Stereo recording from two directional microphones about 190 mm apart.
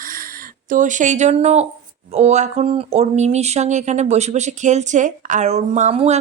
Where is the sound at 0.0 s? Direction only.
45° right (ahead or behind).